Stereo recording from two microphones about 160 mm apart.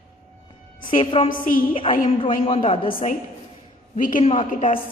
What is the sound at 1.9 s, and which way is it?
Speech, 45° left (ahead or behind).